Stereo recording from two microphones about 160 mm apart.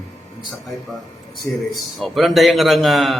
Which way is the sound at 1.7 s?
Centre (ahead or behind).